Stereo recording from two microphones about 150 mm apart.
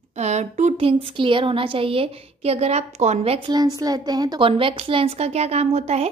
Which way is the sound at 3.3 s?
30° right (ahead or behind).